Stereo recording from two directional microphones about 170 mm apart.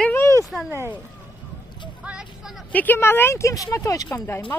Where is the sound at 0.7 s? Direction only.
15° right (ahead or behind).